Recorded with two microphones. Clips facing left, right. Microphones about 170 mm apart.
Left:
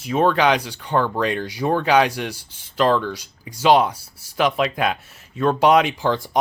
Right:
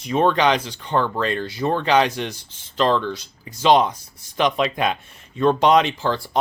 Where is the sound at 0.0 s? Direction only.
5° left (ahead or behind).